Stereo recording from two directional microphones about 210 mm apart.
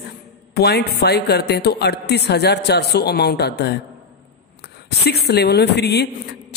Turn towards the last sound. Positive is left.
turn(degrees=55)  # may be behind; listen again after turning